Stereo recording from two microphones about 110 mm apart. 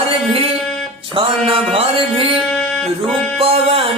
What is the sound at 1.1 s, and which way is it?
Speech, 60° right (ahead or behind).